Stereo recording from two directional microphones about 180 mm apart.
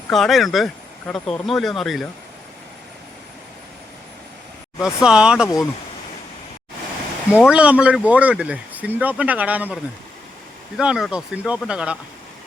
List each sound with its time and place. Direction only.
0.1 s speech: centre (ahead or behind)
4.8 s speech: 5° right (ahead or behind)
7.4 s speech: 5° right (ahead or behind)
10.8 s speech: 5° right (ahead or behind)